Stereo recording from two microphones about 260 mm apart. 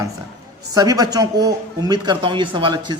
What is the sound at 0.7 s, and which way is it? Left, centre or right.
A man's voice, centre.